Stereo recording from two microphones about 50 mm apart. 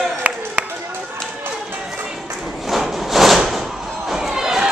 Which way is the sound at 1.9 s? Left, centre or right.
Centre.